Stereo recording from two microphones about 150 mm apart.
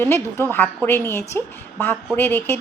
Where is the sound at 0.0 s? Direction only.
15° left (ahead or behind).